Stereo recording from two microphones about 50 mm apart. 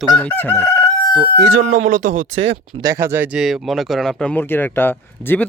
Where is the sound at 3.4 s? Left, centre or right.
Centre.